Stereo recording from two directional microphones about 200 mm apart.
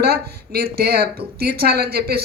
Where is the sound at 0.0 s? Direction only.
50° right (ahead or behind).